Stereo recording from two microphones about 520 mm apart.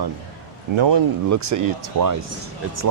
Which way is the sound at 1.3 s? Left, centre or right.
Right.